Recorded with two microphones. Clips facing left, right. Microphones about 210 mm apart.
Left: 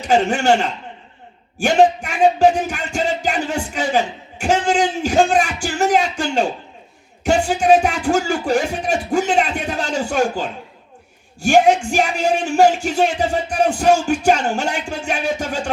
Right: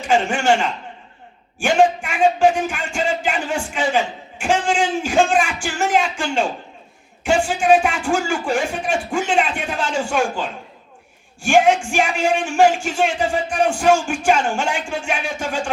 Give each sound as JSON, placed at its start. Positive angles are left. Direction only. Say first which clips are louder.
{"t": 0.1, "sound": "speech", "louder": "left 2 dB", "side_deg": 40}
{"t": 1.5, "sound": "music", "louder": "left 2 dB", "side_deg": 40}
{"t": 7.3, "sound": "speech", "louder": "left 1 dB", "side_deg": 40}